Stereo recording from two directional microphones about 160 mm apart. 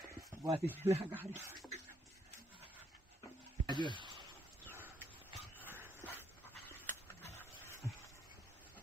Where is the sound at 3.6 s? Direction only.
30° right (ahead or behind).